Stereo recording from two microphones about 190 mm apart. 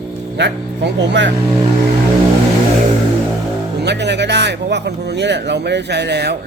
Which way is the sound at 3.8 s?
65° right (ahead or behind).